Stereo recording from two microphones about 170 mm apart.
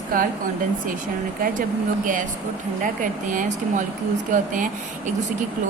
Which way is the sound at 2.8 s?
50° right (ahead or behind).